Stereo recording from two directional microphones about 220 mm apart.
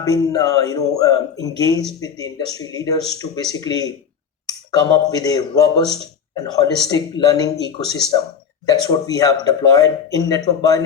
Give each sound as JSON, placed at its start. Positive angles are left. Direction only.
{"t": 0.0, "sound": "speech", "side_deg": 15}
{"t": 8.6, "sound": "speech", "side_deg": 15}